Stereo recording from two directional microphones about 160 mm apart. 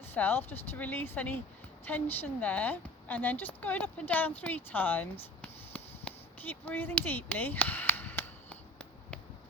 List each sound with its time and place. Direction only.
0.1 s a woman's voice: 10° left (ahead or behind)